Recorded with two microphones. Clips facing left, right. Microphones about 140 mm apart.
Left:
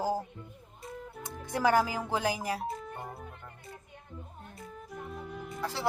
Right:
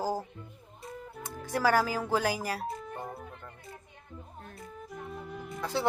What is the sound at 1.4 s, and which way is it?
Speech, 20° left (ahead or behind).